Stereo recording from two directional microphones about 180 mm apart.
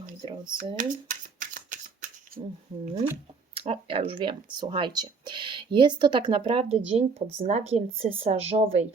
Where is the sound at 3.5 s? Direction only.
30° right (ahead or behind).